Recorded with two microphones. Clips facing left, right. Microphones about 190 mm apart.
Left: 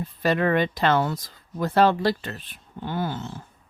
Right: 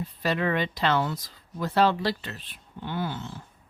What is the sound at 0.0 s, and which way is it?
Speech, 50° left (ahead or behind).